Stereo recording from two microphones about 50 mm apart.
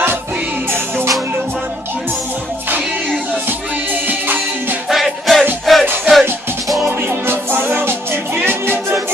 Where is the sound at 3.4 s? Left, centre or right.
Right.